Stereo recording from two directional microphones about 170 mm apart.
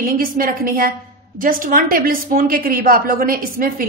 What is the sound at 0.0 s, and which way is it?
A woman's voice, 55° right (ahead or behind).